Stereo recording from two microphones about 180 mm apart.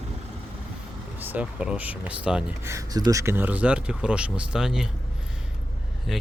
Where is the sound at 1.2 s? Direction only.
10° right (ahead or behind).